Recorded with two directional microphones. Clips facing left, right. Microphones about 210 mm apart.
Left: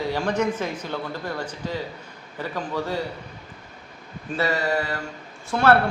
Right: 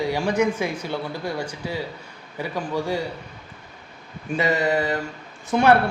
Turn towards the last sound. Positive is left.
turn(degrees=-15)  # may be behind; listen again after turning